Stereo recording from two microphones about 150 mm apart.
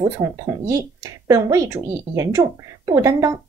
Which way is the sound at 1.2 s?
20° right (ahead or behind).